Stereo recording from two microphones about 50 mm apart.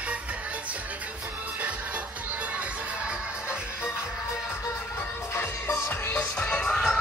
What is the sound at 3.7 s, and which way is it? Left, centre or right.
Music, left.